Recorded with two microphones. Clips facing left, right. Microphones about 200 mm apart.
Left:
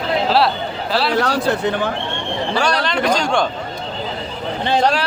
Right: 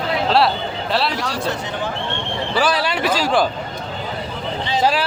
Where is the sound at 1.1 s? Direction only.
60° left (ahead or behind).